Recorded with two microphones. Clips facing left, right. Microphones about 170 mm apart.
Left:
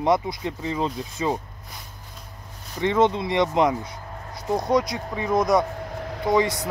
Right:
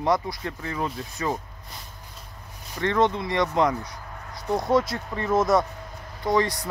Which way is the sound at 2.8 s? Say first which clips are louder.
Left 2 dB; 15° left (ahead or behind).